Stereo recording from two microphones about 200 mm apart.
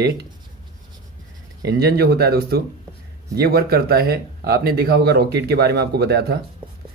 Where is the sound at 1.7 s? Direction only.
55° right (ahead or behind).